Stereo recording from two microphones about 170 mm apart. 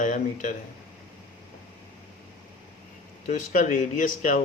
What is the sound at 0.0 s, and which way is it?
Speech, 50° left (ahead or behind).